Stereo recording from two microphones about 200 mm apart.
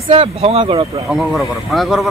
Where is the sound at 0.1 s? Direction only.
30° right (ahead or behind).